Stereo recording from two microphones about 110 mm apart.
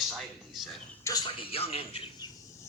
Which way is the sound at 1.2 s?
60° left (ahead or behind).